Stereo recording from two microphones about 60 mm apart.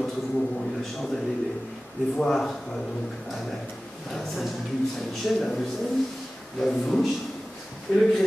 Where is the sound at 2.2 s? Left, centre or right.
Centre.